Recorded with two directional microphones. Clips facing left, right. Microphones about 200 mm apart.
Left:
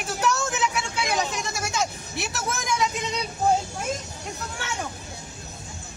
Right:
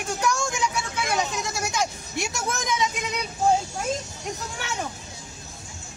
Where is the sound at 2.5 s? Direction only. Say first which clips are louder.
Left 1 dB; centre (ahead or behind).